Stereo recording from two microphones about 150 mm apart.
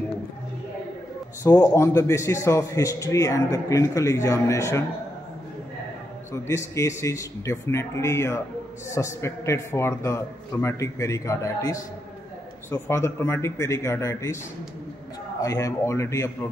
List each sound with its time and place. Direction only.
1.4 s a man's voice: 20° left (ahead or behind)
6.3 s a man's voice: 20° left (ahead or behind)
15.4 s a man's voice: 20° left (ahead or behind)